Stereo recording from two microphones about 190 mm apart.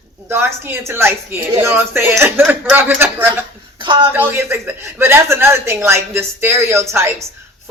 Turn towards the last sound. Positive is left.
turn(degrees=-15)  # may be behind; listen again after turning